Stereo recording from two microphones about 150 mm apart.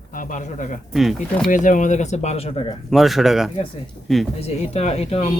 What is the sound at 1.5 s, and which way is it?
Speech, 60° left (ahead or behind).